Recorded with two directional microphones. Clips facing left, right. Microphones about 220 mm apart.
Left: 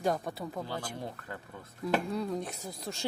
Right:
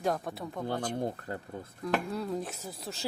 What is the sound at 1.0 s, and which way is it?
Speech, 45° right (ahead or behind).